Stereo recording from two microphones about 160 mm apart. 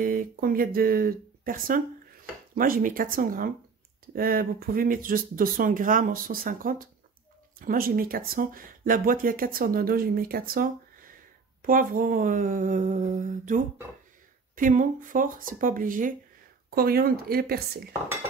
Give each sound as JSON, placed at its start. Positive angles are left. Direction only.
{"t": 0.0, "sound": "speech", "side_deg": -65}
{"t": 16.7, "sound": "speech", "side_deg": -70}